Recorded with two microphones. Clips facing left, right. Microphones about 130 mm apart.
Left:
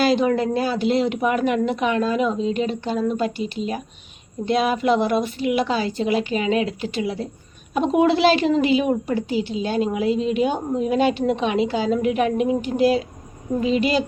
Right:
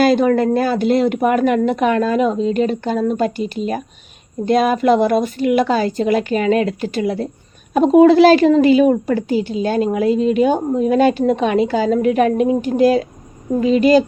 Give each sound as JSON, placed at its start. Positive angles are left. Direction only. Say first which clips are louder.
{"t": 0.0, "sound": "a woman's voice", "louder": "right 5 dB", "side_deg": -50}